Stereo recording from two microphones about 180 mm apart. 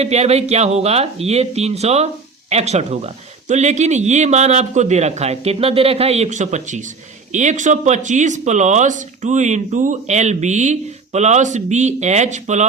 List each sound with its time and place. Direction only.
0.0 s speech: 35° right (ahead or behind)